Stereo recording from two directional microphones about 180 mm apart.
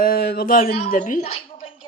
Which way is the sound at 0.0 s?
60° left (ahead or behind).